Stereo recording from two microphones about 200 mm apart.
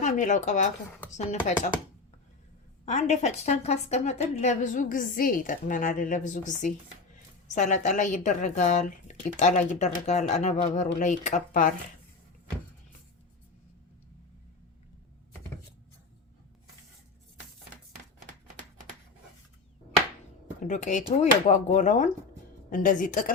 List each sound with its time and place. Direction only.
0.0 s speech: 40° left (ahead or behind)
2.8 s speech: 35° left (ahead or behind)
20.6 s speech: 40° left (ahead or behind)